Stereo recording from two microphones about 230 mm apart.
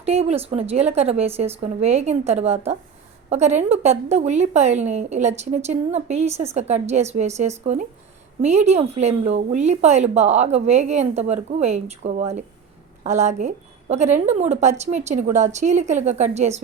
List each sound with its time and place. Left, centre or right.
0.0 s a woman's voice: right